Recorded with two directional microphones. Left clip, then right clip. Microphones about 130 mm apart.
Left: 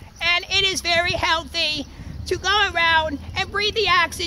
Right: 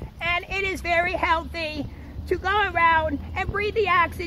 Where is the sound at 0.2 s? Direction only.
35° left (ahead or behind).